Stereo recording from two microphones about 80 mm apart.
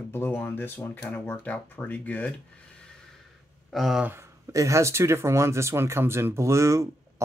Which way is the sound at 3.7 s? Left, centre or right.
Centre.